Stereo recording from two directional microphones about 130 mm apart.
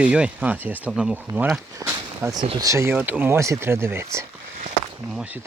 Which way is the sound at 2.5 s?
25° right (ahead or behind).